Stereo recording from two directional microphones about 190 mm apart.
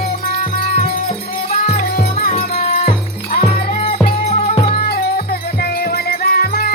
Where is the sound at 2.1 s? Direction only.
35° left (ahead or behind).